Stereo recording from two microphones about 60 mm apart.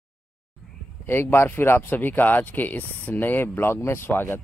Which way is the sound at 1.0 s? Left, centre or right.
Left.